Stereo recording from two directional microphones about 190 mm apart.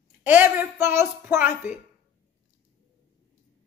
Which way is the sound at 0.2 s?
10° right (ahead or behind).